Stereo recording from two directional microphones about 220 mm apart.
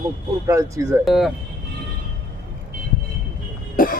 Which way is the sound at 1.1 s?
Centre (ahead or behind).